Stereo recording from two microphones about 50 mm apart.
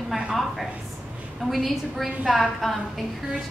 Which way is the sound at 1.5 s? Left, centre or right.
Centre.